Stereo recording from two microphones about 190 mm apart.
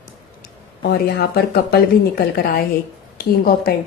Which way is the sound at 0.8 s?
55° left (ahead or behind).